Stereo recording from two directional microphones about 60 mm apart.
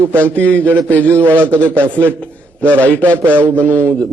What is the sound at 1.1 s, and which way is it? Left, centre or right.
A man's voice, right.